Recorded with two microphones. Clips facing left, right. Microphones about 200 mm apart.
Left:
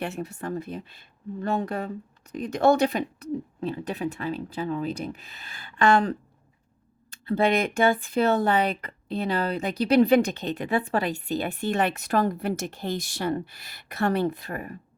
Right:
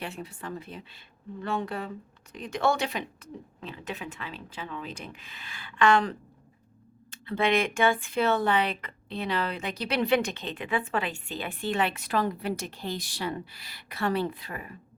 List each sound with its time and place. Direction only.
0.0 s speech: 45° left (ahead or behind)